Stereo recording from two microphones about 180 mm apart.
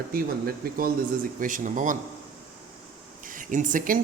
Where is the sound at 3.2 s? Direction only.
45° right (ahead or behind).